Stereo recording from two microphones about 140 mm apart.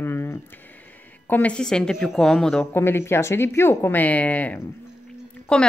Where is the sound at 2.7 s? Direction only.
15° left (ahead or behind).